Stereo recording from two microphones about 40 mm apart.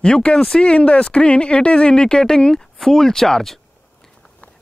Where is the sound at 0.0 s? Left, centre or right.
Left; by 3.5 s centre.